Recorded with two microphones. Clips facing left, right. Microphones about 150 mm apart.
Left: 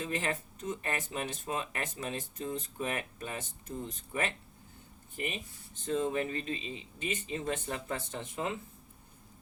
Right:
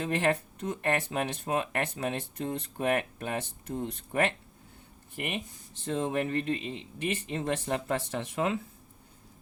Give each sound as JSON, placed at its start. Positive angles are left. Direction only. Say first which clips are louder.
{"t": 0.0, "sound": "a man's voice", "louder": "right 7 dB", "side_deg": -65}